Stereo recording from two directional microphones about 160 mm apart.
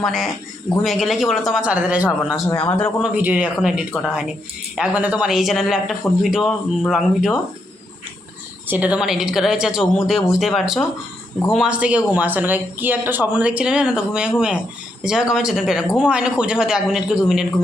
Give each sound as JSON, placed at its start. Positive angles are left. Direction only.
{"t": 0.0, "sound": "a man's voice", "side_deg": 0}
{"t": 2.5, "sound": "speech", "side_deg": 20}
{"t": 3.2, "sound": "a man's voice", "side_deg": -10}
{"t": 8.6, "sound": "a man's voice", "side_deg": -10}